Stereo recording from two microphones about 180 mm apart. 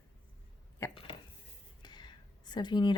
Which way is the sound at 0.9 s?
30° left (ahead or behind).